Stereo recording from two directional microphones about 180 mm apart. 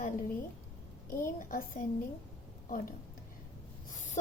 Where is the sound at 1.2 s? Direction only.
55° left (ahead or behind).